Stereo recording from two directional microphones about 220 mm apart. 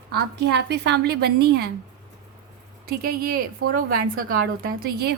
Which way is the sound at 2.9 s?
45° right (ahead or behind).